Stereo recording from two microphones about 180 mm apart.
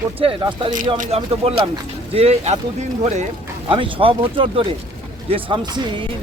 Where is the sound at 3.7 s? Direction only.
30° right (ahead or behind).